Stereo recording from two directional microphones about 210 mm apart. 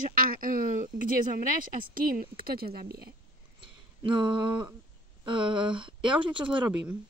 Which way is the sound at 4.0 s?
25° right (ahead or behind).